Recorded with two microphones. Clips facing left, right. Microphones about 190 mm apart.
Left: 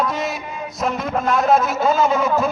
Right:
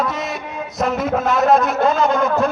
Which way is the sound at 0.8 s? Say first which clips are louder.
Right 3 dB; centre (ahead or behind).